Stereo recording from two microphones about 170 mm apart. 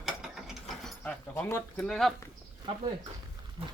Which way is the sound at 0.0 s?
Centre (ahead or behind).